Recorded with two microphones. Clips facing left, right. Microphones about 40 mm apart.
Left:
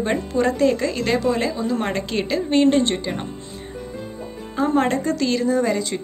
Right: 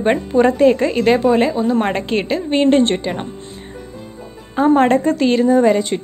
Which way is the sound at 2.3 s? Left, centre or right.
Centre.